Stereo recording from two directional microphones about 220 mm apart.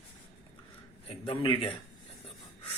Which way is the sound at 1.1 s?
20° left (ahead or behind).